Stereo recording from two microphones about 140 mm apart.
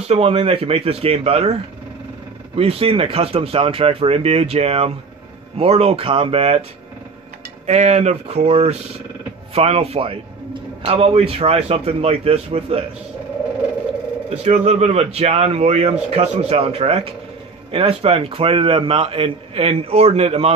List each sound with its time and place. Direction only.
0.0 s a man's voice: 45° right (ahead or behind)
7.6 s a man's voice: 55° right (ahead or behind)
14.3 s a man's voice: 50° right (ahead or behind)